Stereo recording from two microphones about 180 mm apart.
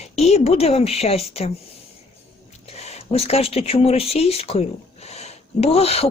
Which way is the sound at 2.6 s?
35° left (ahead or behind).